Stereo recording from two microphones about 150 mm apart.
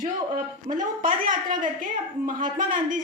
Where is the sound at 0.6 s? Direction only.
65° right (ahead or behind).